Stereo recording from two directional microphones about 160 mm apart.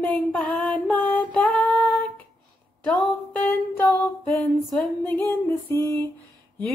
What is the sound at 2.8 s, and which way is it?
Music, 5° left (ahead or behind).